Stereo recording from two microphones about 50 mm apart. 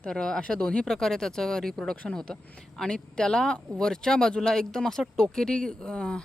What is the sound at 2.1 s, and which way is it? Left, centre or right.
Speech, left.